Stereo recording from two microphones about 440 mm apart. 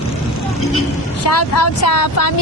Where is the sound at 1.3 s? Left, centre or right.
Left.